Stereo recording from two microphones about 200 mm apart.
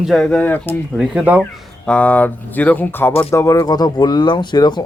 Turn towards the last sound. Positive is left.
turn(degrees=20)  # may be behind; listen again after turning